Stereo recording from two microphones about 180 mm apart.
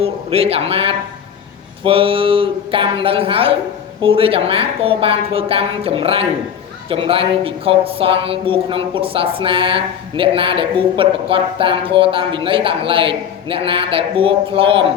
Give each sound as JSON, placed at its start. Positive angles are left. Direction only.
{"t": 0.0, "sound": "a woman's voice", "side_deg": -35}